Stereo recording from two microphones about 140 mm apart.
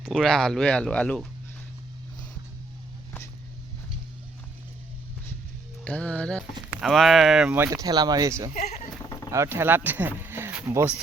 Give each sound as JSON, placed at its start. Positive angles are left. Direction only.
{"t": 0.0, "sound": "speech", "side_deg": 0}
{"t": 5.8, "sound": "music", "side_deg": 10}
{"t": 6.7, "sound": "speech", "side_deg": 0}